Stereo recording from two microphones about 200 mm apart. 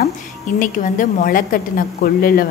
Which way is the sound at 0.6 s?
45° left (ahead or behind).